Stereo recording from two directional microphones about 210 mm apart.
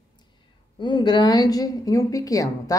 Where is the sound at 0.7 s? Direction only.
20° left (ahead or behind).